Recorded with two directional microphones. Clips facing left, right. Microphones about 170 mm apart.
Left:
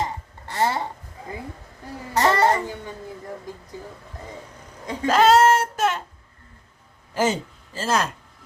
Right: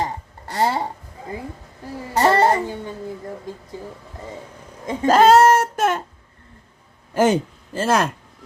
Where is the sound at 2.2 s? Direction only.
35° right (ahead or behind).